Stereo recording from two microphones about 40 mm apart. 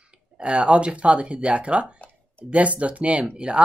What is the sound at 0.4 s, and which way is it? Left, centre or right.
Speech, right.